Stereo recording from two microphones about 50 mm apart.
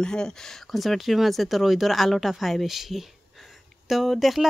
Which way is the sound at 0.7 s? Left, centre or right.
Centre.